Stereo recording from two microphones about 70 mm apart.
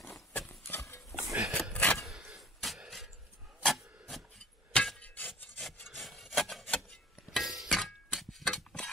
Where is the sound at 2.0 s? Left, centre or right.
Centre.